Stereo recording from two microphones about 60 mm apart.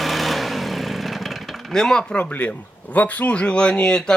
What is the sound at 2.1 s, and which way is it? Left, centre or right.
Speech, left.